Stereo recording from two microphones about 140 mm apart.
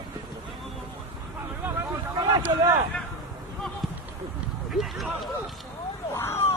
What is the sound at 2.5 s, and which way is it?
Speech, 25° right (ahead or behind).